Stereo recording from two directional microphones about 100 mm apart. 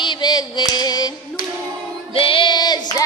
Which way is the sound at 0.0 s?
45° left (ahead or behind).